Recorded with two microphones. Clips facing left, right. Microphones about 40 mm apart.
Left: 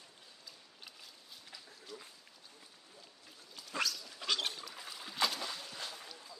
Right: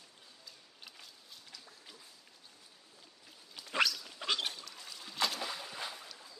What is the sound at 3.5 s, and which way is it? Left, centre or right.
Dog, right.